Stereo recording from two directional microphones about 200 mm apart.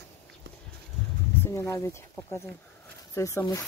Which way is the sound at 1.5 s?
15° left (ahead or behind).